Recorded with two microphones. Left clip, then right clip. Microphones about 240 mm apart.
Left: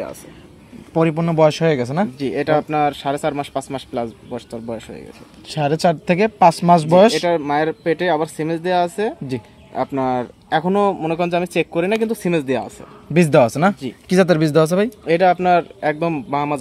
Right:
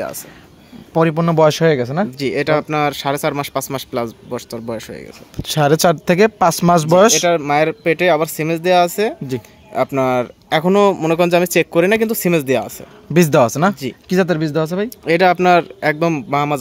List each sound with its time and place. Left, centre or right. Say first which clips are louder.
0.9 s speech: right 3 dB; right
2.1 s speech: right 2 dB; right
9.3 s speech: right 3 dB; centre
9.8 s speech: right 4 dB; right
13.1 s speech: right 1 dB; centre
14.0 s speech: left 2 dB; centre
14.9 s speech: right 2 dB; right